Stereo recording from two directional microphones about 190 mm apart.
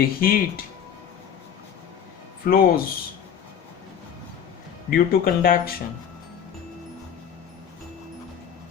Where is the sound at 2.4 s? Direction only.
50° left (ahead or behind).